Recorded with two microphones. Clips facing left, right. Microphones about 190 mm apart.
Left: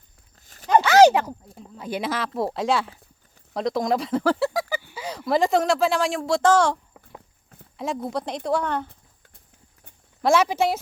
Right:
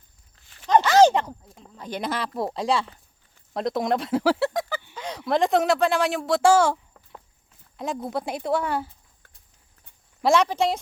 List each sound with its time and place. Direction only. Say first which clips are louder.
0.3 s walk: left 4 dB; 40° left (ahead or behind)
0.7 s a sound: left 2 dB; 10° left (ahead or behind)
3.5 s speech: left 1 dB; centre (ahead or behind)
7.8 s speech: left 1 dB; centre (ahead or behind)
10.2 s speech: left 1 dB; 5° left (ahead or behind)